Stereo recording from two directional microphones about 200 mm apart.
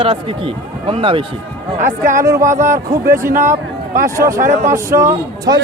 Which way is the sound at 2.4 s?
40° right (ahead or behind).